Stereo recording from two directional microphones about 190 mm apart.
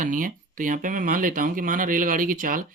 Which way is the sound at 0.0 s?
45° right (ahead or behind).